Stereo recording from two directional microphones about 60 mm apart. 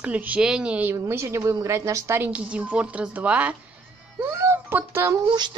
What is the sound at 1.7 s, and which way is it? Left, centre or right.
Speech, right.